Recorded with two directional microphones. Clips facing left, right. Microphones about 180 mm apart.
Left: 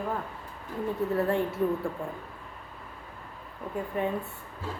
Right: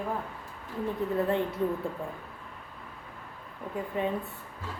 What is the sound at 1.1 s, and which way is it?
Speech, 20° right (ahead or behind).